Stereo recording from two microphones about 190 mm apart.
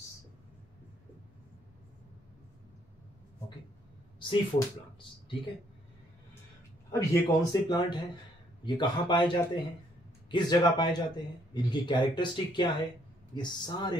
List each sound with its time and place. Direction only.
4.2 s speech: 25° left (ahead or behind)
6.9 s a man's voice: 15° left (ahead or behind)